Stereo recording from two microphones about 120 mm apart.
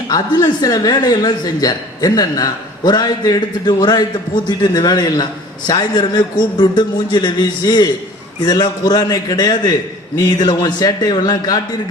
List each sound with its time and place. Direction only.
0.1 s a man's voice: 35° left (ahead or behind)